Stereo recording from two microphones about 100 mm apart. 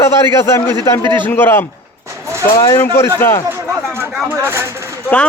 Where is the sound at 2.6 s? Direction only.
30° left (ahead or behind).